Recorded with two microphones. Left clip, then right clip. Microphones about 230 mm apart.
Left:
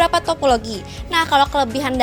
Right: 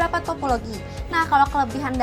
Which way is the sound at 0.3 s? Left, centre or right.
Left.